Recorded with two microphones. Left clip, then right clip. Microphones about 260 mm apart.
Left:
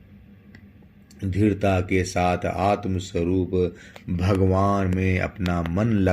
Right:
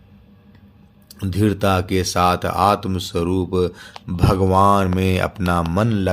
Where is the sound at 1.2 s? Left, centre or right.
Right.